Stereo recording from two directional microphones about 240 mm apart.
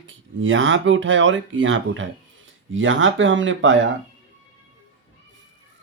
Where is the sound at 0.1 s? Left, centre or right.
Right.